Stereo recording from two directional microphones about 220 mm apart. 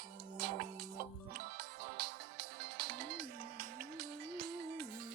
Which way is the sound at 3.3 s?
40° right (ahead or behind).